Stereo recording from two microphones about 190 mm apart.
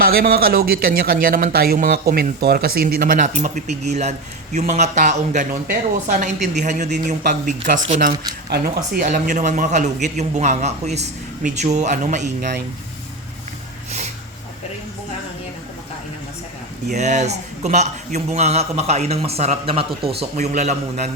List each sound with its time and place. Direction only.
0.0 s a man's voice: 50° right (ahead or behind)
8.4 s speech: 55° right (ahead or behind)
9.0 s a man's voice: 40° right (ahead or behind)
16.9 s a man's voice: 40° right (ahead or behind)